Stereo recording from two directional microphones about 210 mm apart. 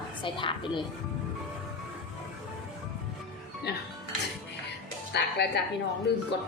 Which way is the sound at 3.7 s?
50° left (ahead or behind).